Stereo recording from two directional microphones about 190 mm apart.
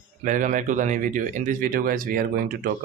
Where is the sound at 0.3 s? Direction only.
45° right (ahead or behind).